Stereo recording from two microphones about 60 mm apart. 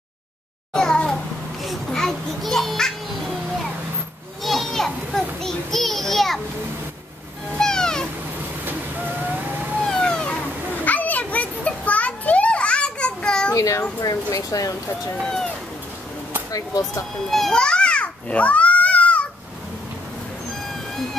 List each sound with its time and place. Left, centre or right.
0.7 s a sound: centre
1.6 s children playing: centre
4.4 s a child's voice: centre
7.5 s cat: centre
8.6 s ocean: right
9.8 s cat: centre
10.7 s children playing: left
13.6 s a child's voice: left
14.3 s speech: left
15.2 s speech: centre
16.5 s speech: left
17.3 s babbling: centre; by 19.2 s left